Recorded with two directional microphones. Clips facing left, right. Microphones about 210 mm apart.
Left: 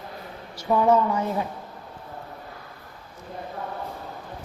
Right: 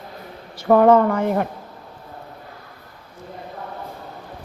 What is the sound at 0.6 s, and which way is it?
Speech, 55° right (ahead or behind).